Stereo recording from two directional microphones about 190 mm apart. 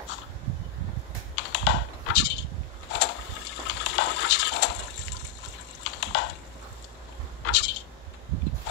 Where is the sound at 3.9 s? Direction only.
70° left (ahead or behind).